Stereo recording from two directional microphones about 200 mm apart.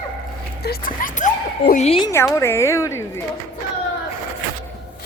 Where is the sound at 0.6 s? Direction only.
45° left (ahead or behind); by 2.1 s 30° left (ahead or behind).